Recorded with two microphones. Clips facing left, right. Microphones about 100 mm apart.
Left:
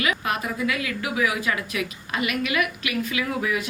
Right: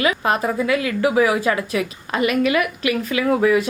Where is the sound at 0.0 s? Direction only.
35° right (ahead or behind).